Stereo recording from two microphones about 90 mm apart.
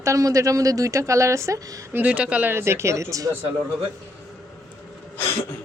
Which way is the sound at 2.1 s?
15° right (ahead or behind).